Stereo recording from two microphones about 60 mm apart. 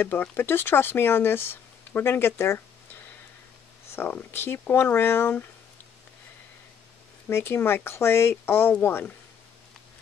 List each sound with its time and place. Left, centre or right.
0.0 s speech: left
7.2 s speech: left